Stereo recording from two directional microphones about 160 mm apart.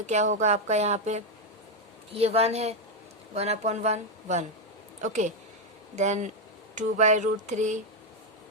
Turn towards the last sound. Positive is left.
turn(degrees=-50)  # may be behind; listen again after turning